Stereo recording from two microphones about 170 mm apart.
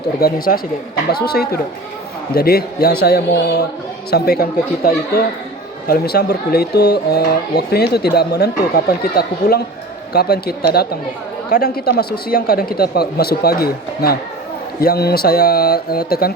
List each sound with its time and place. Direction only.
0.2 s speech: 60° left (ahead or behind)